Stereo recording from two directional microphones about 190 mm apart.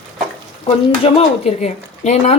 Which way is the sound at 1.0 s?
35° left (ahead or behind).